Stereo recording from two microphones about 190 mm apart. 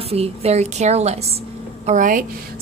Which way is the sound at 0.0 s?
30° right (ahead or behind).